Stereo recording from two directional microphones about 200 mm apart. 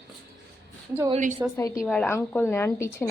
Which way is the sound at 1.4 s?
15° right (ahead or behind).